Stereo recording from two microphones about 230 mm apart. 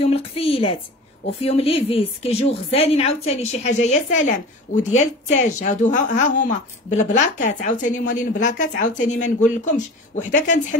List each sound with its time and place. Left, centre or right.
0.0 s a woman's voice: left